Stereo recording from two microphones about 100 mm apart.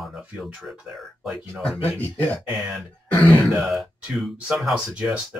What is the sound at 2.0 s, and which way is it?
Speech, 20° left (ahead or behind).